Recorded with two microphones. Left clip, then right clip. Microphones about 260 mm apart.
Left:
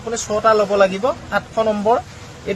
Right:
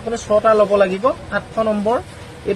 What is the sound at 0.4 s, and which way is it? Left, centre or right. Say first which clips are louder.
Speech: left 1 dB; left.